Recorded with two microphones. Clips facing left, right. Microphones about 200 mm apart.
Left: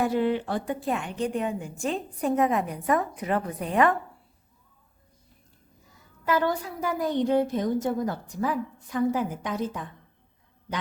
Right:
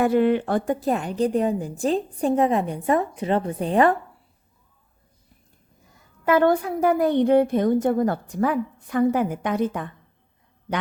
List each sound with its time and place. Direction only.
0.0 s a woman's voice: 60° right (ahead or behind); by 3.9 s 30° right (ahead or behind)
6.2 s a woman's voice: 55° right (ahead or behind)